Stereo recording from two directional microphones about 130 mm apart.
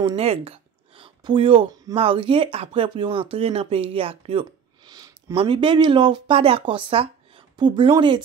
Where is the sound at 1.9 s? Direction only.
40° right (ahead or behind).